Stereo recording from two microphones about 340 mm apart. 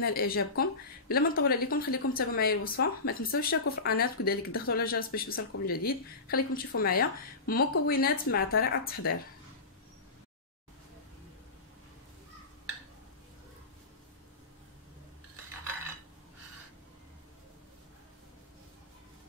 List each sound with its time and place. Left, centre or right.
0.0 s speech: left